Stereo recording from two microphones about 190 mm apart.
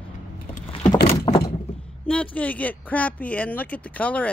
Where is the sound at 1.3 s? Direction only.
30° left (ahead or behind).